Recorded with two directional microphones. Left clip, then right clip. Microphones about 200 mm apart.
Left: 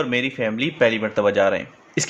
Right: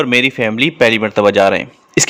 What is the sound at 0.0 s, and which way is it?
Speech, 60° right (ahead or behind).